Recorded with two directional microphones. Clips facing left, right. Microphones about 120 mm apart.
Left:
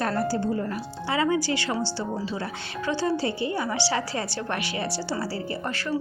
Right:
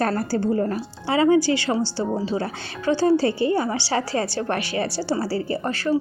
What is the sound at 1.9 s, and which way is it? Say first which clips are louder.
A woman's voice: right 6 dB; 30° right (ahead or behind).